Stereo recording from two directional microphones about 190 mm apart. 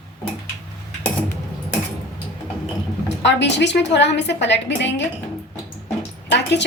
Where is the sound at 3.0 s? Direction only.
65° left (ahead or behind).